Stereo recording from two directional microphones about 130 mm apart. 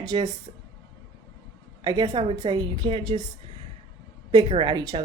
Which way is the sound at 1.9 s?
30° right (ahead or behind).